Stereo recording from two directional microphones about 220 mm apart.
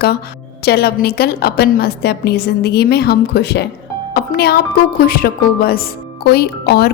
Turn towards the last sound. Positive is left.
turn(degrees=45)  # may be behind; listen again after turning